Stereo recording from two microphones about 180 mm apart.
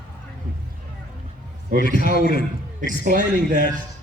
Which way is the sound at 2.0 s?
50° right (ahead or behind).